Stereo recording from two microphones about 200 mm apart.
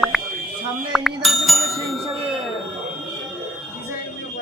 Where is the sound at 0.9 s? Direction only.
Centre (ahead or behind).